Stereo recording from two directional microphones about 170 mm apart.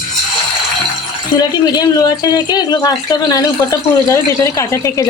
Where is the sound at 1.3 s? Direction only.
25° left (ahead or behind).